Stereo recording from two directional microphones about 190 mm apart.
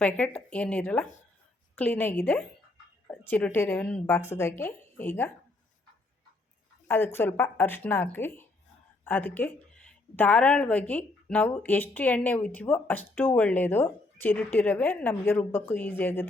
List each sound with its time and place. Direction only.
0.0 s a woman's voice: 5° left (ahead or behind)
6.8 s a woman's voice: 10° left (ahead or behind)